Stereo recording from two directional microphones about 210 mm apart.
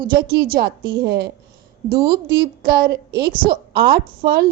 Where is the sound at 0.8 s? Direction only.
25° right (ahead or behind).